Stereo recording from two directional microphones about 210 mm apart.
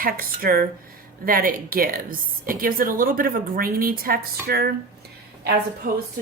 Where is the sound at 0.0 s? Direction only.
45° right (ahead or behind).